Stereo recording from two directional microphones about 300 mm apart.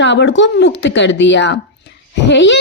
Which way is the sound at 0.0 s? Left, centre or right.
Left.